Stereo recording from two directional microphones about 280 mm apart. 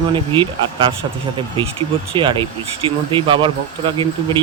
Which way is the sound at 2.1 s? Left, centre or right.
Centre.